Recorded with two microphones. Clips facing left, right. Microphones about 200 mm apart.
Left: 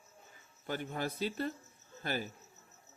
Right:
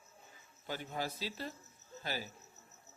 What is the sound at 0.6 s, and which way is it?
Speech, 55° left (ahead or behind).